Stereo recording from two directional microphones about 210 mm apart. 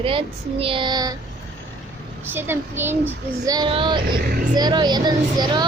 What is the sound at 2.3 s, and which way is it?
A child's voice, 10° right (ahead or behind).